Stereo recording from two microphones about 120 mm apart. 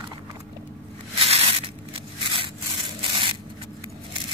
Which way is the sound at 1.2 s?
55° right (ahead or behind).